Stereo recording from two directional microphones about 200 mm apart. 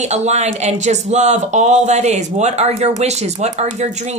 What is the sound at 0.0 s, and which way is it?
Speech, 35° right (ahead or behind).